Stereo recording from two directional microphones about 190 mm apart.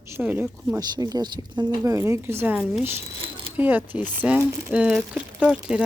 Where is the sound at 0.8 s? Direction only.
20° right (ahead or behind).